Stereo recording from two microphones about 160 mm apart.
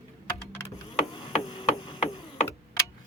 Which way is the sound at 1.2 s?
35° left (ahead or behind).